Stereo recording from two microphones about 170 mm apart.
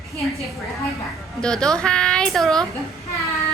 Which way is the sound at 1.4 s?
5° left (ahead or behind).